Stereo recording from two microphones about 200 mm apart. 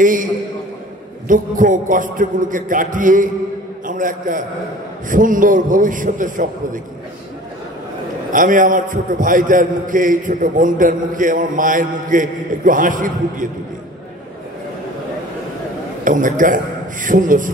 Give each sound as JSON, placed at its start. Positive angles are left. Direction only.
{"t": 0.0, "sound": "a man's voice", "side_deg": -40}
{"t": 8.3, "sound": "a man's voice", "side_deg": -40}
{"t": 16.0, "sound": "a man's voice", "side_deg": -40}